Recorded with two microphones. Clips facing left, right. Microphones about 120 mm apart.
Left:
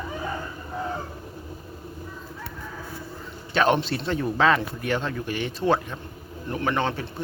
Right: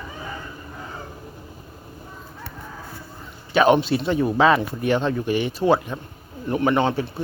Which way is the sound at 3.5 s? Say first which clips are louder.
Right 5 dB; 10° right (ahead or behind).